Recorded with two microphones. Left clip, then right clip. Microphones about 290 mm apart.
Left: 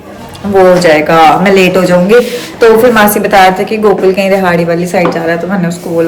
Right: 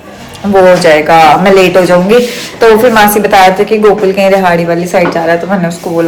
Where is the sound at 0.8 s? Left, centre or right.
Centre.